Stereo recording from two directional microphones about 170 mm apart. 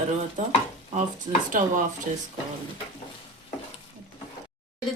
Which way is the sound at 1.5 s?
50° right (ahead or behind).